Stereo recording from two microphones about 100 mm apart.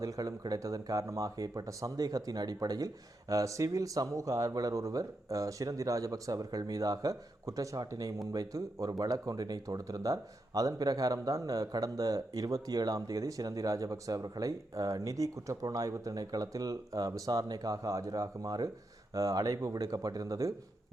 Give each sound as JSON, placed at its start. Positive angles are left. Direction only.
{"t": 0.0, "sound": "speech", "side_deg": -35}